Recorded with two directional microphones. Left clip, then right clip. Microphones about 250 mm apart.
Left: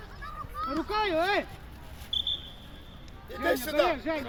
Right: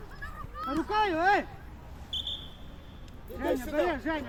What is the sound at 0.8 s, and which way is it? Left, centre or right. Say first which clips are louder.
Speech: right 2 dB; right.